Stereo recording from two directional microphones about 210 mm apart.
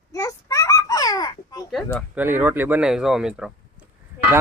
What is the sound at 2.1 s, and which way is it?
Speech, 10° right (ahead or behind).